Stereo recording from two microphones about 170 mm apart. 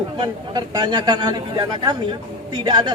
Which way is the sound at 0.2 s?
25° right (ahead or behind).